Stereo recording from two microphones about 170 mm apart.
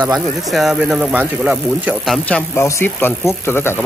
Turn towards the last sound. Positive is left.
turn(degrees=15)  # may be behind; listen again after turning